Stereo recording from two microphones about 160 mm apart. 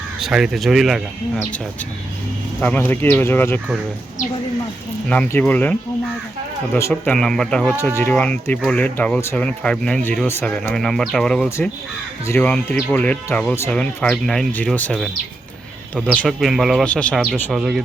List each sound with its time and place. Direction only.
0.2 s a man's voice: 5° right (ahead or behind)
2.6 s speech: 10° left (ahead or behind)
5.0 s speech: 10° left (ahead or behind)
6.9 s a man's voice: 5° left (ahead or behind)
11.4 s speech: 15° left (ahead or behind)
16.1 s a man's voice: centre (ahead or behind)